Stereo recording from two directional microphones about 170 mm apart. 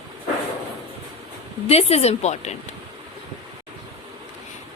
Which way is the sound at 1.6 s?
40° left (ahead or behind).